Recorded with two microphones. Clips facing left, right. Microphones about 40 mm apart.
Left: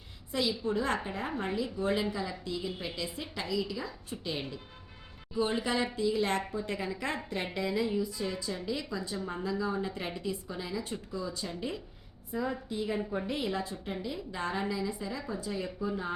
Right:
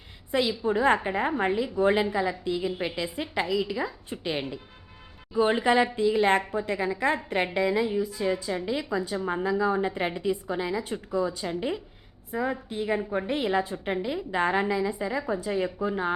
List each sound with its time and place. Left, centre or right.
0.3 s a woman's voice: right
6.5 s a woman's voice: right
9.2 s a woman's voice: right